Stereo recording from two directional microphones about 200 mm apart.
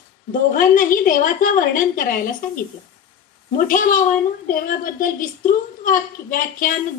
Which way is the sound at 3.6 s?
40° left (ahead or behind).